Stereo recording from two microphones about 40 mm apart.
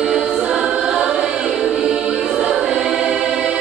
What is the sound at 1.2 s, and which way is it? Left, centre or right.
Choir, centre.